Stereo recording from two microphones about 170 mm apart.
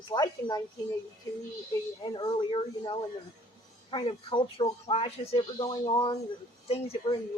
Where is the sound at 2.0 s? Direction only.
25° left (ahead or behind).